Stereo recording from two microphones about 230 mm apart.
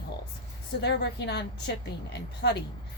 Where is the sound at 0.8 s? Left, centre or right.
Left.